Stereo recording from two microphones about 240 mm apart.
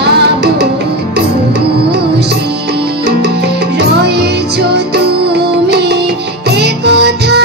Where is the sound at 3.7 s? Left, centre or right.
Right.